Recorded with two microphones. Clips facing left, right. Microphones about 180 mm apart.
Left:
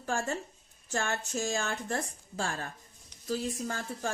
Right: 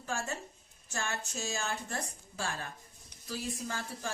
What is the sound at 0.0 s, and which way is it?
A woman's voice, 50° left (ahead or behind).